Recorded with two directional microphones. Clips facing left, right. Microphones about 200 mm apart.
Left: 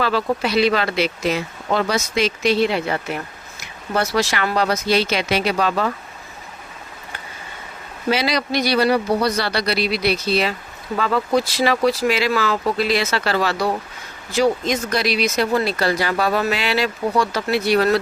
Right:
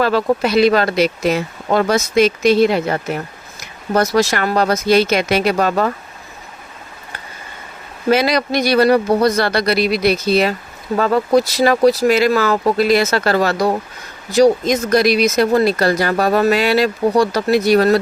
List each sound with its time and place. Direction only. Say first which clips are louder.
0.0 s speech: right 5 dB; 45° right (ahead or behind)
8.1 s speech: right 5 dB; 50° right (ahead or behind)